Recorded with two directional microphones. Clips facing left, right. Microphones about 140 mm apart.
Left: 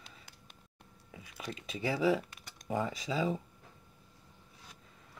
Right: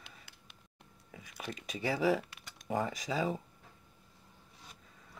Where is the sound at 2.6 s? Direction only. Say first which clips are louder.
Even; 35° right (ahead or behind).